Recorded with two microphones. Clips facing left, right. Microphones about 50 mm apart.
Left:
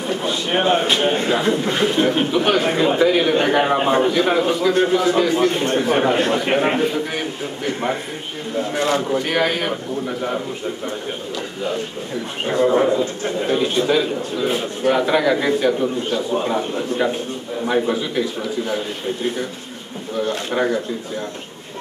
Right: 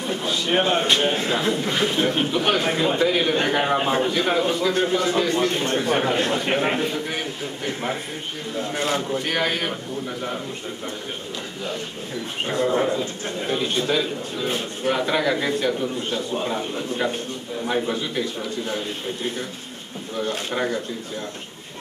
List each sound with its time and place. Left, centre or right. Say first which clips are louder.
0.0 s a man's voice: left 3 dB; centre
9.2 s a man's voice: left 4 dB; centre
12.4 s a man's voice: left 6 dB; centre